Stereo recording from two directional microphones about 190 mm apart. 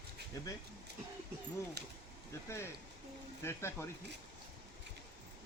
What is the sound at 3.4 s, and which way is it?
Speech, 15° left (ahead or behind).